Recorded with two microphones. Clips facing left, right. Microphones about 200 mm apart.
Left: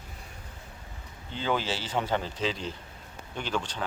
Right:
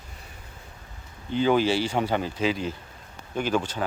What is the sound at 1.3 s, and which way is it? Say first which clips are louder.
Speech: right 9 dB; 15° right (ahead or behind).